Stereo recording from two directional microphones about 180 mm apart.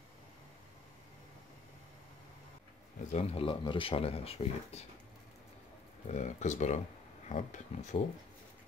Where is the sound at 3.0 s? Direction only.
40° left (ahead or behind).